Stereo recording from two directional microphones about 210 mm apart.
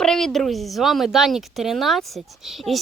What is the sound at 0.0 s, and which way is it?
A woman's voice, centre (ahead or behind).